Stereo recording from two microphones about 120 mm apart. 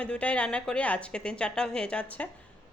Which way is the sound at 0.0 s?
10° left (ahead or behind).